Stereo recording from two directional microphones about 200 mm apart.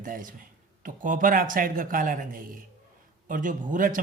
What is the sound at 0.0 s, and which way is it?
A man's voice, 40° right (ahead or behind).